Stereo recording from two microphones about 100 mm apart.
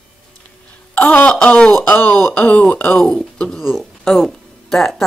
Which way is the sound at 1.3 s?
10° left (ahead or behind).